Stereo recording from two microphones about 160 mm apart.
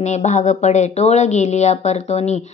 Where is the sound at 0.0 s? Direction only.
45° left (ahead or behind).